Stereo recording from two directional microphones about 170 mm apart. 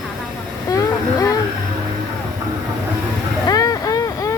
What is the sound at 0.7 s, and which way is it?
Vehicle, 20° left (ahead or behind).